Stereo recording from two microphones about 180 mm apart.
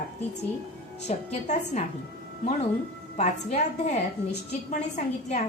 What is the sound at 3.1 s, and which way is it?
A woman's voice, 35° left (ahead or behind).